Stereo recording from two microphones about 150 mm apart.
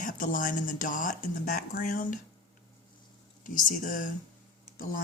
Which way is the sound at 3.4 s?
65° left (ahead or behind).